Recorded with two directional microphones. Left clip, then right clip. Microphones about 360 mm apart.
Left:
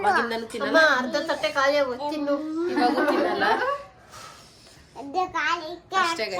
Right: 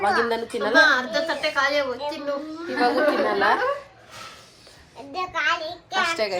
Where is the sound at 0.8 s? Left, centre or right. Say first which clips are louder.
Right 2 dB; left.